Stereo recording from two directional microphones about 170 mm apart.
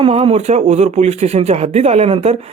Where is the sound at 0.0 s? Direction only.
35° right (ahead or behind).